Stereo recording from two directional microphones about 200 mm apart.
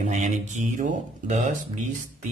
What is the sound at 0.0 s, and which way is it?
Speech, 35° right (ahead or behind).